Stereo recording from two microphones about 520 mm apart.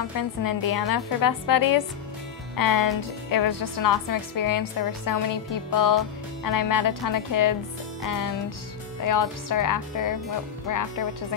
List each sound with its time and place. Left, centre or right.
0.2 s a woman's voice: left
9.0 s a woman's voice: left